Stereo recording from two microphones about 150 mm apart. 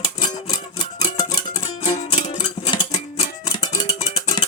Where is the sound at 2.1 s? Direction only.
45° left (ahead or behind).